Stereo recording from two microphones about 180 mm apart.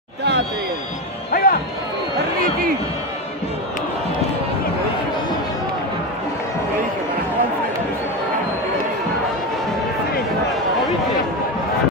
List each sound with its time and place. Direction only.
0.2 s basketball bounce: 70° right (ahead or behind)
1.3 s music: 55° left (ahead or behind)